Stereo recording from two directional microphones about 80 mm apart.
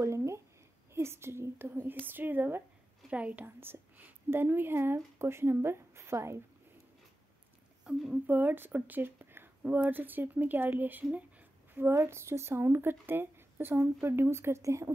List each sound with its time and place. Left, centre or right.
0.0 s a sound: right
0.9 s a woman's voice: right
8.1 s speech: right
11.9 s speech: right